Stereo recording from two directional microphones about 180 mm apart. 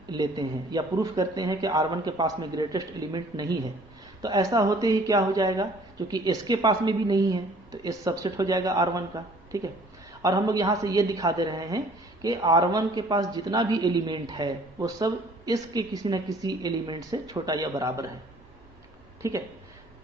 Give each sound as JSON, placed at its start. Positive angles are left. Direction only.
{"t": 0.1, "sound": "a man's voice", "side_deg": -25}